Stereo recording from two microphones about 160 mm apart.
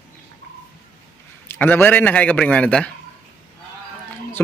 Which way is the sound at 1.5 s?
15° left (ahead or behind).